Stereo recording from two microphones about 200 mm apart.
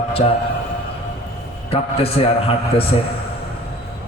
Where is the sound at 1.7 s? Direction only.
30° left (ahead or behind).